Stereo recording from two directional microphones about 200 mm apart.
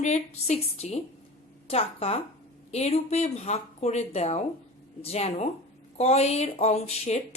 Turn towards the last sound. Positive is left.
turn(degrees=30)  # may be behind; listen again after turning